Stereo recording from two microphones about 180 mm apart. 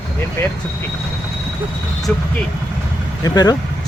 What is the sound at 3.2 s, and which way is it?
Speech, 20° left (ahead or behind).